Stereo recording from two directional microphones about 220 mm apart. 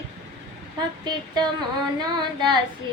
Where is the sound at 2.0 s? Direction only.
20° right (ahead or behind).